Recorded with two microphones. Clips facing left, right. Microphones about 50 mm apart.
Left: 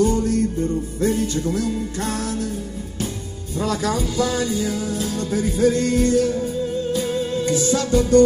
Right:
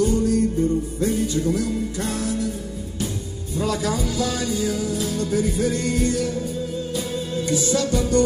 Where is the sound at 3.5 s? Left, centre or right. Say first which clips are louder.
Left 1 dB; left.